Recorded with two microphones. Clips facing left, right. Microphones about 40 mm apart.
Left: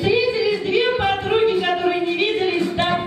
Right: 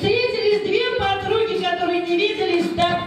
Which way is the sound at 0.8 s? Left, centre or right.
Centre.